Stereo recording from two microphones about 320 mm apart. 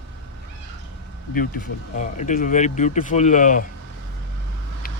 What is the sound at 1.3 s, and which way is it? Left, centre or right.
Speech, left.